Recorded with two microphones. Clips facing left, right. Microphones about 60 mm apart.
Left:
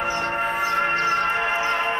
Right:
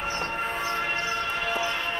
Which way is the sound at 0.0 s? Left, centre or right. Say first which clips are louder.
Left 6 dB; left.